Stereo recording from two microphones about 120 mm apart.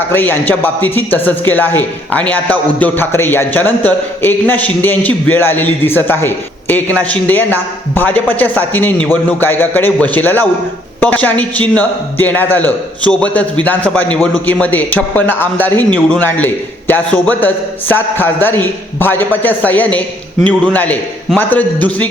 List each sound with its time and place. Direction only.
0.1 s a man's voice: 15° left (ahead or behind)